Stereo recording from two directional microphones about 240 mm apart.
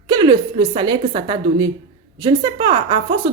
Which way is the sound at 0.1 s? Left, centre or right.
Centre.